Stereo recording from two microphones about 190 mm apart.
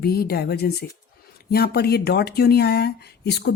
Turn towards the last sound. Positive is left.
turn(degrees=60)  # may be behind; listen again after turning